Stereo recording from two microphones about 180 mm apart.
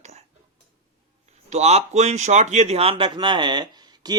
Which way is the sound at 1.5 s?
40° right (ahead or behind).